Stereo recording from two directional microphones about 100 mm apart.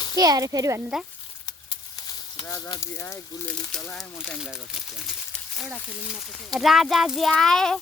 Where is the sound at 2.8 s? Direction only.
30° left (ahead or behind).